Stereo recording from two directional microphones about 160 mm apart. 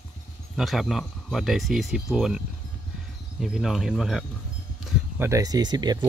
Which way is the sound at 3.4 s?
Centre (ahead or behind).